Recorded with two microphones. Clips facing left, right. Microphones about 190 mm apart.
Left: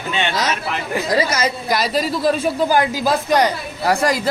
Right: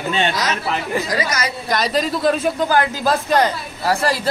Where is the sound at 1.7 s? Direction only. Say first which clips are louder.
Right 2 dB; 5° left (ahead or behind).